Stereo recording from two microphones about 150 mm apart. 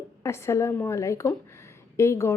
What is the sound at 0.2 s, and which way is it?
A woman's voice, 20° left (ahead or behind).